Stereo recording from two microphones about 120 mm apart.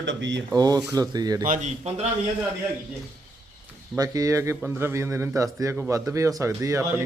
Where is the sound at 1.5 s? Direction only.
90° right.